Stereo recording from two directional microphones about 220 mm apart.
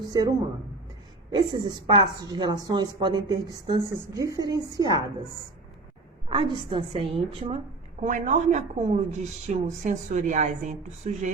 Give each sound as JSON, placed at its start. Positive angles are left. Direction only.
{"t": 0.0, "sound": "a woman's voice", "side_deg": -15}
{"t": 1.4, "sound": "a woman's voice", "side_deg": -20}
{"t": 6.2, "sound": "a woman's voice", "side_deg": -25}
{"t": 8.0, "sound": "speech", "side_deg": -35}